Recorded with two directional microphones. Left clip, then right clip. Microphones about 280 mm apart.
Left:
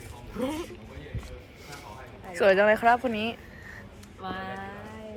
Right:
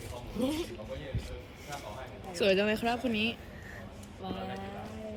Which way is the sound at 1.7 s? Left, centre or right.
Centre.